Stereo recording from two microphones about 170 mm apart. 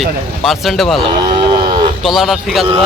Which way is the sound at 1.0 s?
25° right (ahead or behind).